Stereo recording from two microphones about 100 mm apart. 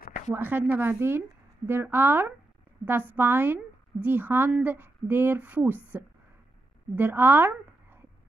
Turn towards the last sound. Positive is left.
turn(degrees=-20)  # may be behind; listen again after turning